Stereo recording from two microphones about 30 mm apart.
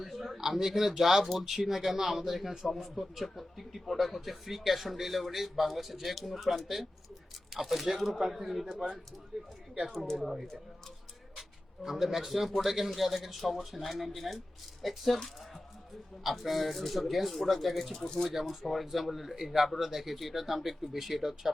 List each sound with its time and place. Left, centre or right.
0.0 s speech: centre
9.9 s speech: centre
11.9 s speech: centre
16.2 s speech: centre
17.9 s speech: left
18.4 s speech: centre